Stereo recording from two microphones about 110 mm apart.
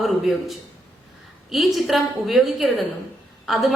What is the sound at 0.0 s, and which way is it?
A man's voice, centre (ahead or behind).